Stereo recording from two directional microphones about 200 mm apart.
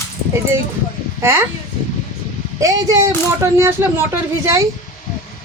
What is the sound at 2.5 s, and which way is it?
A woman's voice, 15° right (ahead or behind).